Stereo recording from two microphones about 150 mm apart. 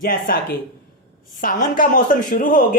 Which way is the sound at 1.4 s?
65° left (ahead or behind).